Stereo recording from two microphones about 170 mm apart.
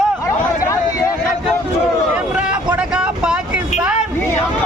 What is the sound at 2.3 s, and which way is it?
Vehicle, 5° right (ahead or behind).